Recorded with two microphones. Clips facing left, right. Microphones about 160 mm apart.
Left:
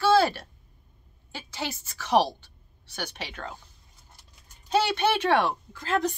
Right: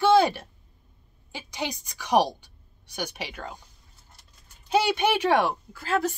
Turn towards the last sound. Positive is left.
turn(degrees=-10)  # may be behind; listen again after turning